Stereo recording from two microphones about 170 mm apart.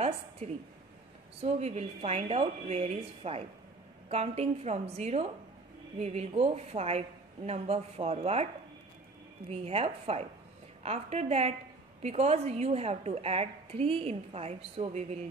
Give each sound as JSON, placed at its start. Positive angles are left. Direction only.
{"t": 0.4, "sound": "a woman's voice", "side_deg": -40}
{"t": 9.5, "sound": "a woman's voice", "side_deg": -35}